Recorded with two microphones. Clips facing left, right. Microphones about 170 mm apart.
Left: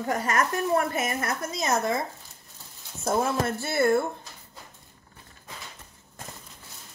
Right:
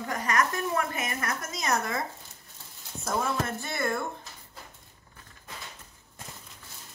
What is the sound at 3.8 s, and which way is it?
Speech, 30° left (ahead or behind).